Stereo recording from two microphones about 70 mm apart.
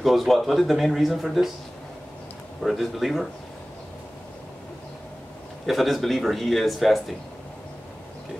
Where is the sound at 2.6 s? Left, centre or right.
Centre.